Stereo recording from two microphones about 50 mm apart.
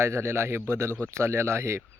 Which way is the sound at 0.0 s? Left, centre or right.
Right.